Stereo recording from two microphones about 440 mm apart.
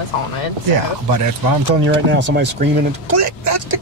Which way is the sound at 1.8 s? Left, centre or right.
Right.